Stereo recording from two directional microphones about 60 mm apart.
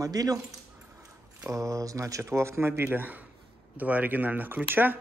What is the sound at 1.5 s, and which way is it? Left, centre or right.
Speech, right.